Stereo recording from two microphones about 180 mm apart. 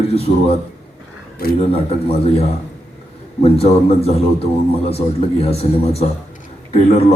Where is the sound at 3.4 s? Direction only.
35° left (ahead or behind).